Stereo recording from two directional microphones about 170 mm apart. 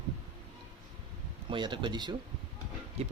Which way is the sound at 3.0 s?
40° right (ahead or behind).